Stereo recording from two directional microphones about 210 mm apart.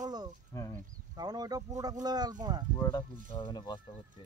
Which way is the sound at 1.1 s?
20° right (ahead or behind).